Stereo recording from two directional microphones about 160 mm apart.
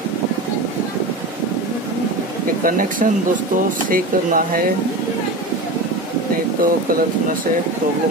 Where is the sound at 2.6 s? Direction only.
60° right (ahead or behind).